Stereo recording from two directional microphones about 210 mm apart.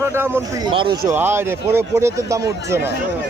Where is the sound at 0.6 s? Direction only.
25° right (ahead or behind).